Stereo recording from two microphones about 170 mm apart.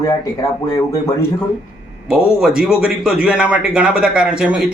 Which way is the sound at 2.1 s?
5° right (ahead or behind).